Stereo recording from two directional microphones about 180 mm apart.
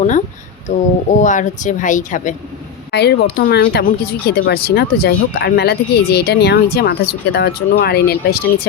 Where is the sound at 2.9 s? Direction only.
65° left (ahead or behind).